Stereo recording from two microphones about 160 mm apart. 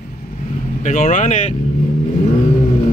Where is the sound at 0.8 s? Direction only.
50° left (ahead or behind).